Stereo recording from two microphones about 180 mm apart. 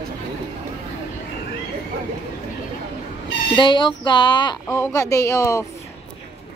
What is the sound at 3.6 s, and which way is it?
A woman's voice, 25° left (ahead or behind).